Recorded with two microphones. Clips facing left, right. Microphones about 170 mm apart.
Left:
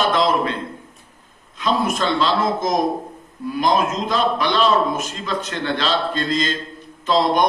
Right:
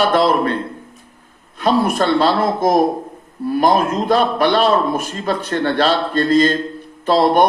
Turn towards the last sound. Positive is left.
turn(degrees=-55)  # may be behind; listen again after turning